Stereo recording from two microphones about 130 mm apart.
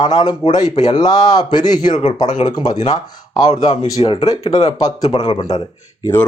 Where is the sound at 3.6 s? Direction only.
55° left (ahead or behind).